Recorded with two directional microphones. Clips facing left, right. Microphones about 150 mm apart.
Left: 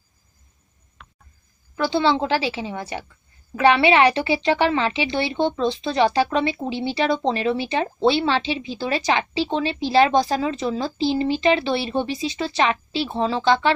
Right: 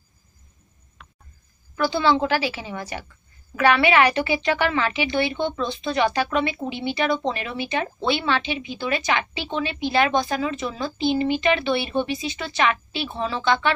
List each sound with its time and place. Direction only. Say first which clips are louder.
1.8 s a woman's voice: even; 25° left (ahead or behind)